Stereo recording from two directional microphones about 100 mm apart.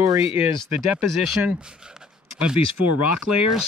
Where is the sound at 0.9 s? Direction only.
15° right (ahead or behind).